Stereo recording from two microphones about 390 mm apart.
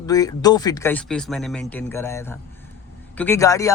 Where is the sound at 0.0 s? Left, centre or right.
Centre.